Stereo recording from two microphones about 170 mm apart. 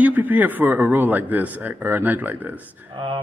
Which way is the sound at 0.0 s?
10° right (ahead or behind).